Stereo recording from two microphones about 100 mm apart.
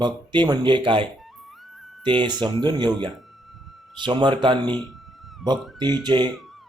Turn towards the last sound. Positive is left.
turn(degrees=-45)  # may be behind; listen again after turning